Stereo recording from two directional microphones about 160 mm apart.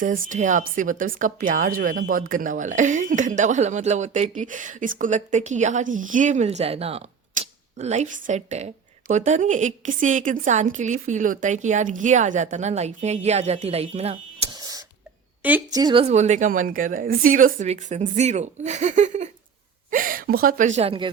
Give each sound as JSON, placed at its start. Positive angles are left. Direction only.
{"t": 0.0, "sound": "speech", "side_deg": -55}
{"t": 14.6, "sound": "a sound", "side_deg": -25}
{"t": 15.7, "sound": "speech", "side_deg": -30}
{"t": 16.0, "sound": "speech", "side_deg": -45}
{"t": 19.9, "sound": "a woman's voice", "side_deg": -60}